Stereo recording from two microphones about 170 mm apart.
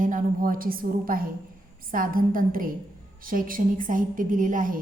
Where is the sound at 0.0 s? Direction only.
50° right (ahead or behind).